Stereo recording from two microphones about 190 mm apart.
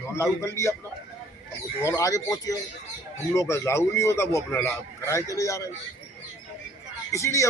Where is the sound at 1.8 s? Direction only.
15° left (ahead or behind).